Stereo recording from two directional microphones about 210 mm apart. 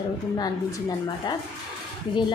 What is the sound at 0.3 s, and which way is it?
A woman's voice, 20° left (ahead or behind).